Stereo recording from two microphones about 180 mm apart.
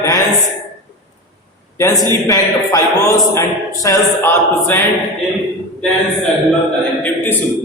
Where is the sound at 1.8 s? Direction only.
20° left (ahead or behind).